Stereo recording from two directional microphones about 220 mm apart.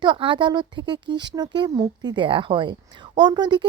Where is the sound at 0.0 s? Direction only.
20° right (ahead or behind).